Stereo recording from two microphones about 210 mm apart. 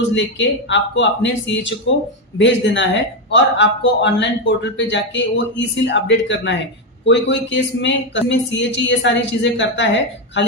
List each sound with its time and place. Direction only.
0.1 s a man's voice: 60° left (ahead or behind)